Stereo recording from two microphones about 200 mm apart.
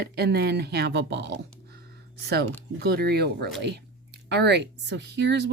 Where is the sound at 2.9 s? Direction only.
50° right (ahead or behind).